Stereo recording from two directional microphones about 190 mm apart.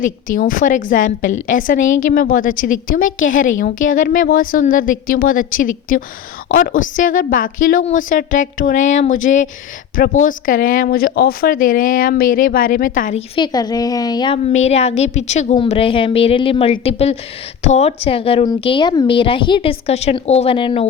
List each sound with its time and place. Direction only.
0.0 s speech: 45° left (ahead or behind)
13.3 s speech: 20° left (ahead or behind)
14.4 s a woman's voice: 35° left (ahead or behind)